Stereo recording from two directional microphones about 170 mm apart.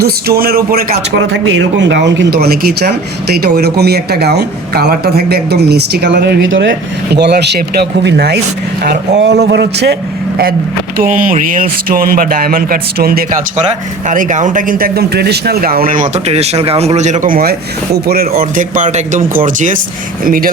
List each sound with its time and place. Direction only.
0.0 s speech: 65° right (ahead or behind)
10.9 s speech: 55° right (ahead or behind)
14.1 s speech: 50° right (ahead or behind); by 18.3 s 65° right (ahead or behind)
18.3 s speech: 50° right (ahead or behind)